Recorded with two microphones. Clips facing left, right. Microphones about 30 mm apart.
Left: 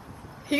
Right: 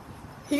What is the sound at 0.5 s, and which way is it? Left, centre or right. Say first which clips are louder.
Speech: left 1 dB; left.